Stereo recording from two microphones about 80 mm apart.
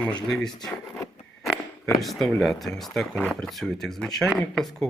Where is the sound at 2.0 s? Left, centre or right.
Centre.